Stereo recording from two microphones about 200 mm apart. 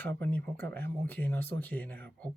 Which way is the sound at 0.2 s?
10° left (ahead or behind).